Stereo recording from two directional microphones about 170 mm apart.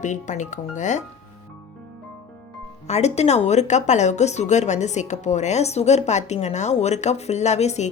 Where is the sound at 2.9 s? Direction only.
40° left (ahead or behind).